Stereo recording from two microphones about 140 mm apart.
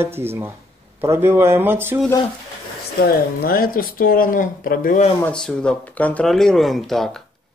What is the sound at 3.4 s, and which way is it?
Speech, 90° left.